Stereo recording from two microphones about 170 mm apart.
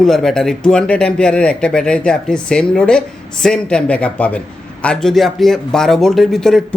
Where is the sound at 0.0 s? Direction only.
Centre (ahead or behind).